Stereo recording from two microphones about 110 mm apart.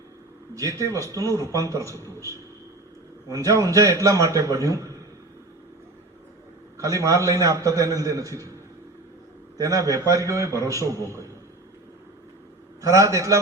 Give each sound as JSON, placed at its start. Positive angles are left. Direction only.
{"t": 0.5, "sound": "a man's voice", "side_deg": -30}
{"t": 6.7, "sound": "a man's voice", "side_deg": -30}
{"t": 9.6, "sound": "a man's voice", "side_deg": -30}
{"t": 12.8, "sound": "a man's voice", "side_deg": -30}